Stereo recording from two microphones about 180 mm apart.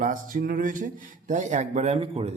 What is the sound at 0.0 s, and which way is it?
Speech, 50° right (ahead or behind).